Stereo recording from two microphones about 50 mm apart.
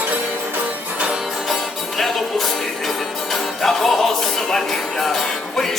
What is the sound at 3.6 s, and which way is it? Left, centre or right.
Music, centre.